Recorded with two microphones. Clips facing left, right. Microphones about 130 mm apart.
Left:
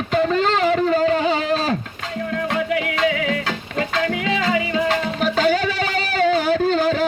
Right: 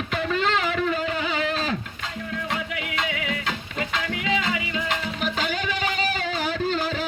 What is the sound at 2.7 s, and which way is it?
Music, 40° left (ahead or behind).